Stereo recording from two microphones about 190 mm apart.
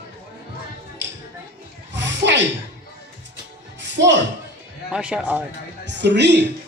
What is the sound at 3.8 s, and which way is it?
Music, 70° right (ahead or behind).